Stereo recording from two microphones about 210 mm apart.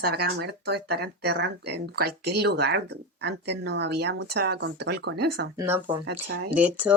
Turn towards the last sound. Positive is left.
turn(degrees=-5)  # may be behind; listen again after turning